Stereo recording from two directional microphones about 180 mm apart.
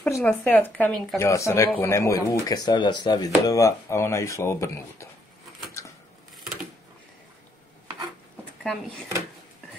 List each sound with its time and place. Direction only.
0.0 s speech: 5° left (ahead or behind)